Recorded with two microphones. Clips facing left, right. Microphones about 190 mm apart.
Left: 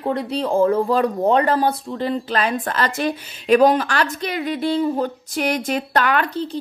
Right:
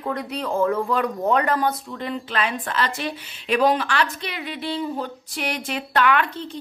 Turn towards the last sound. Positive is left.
turn(degrees=40)  # may be behind; listen again after turning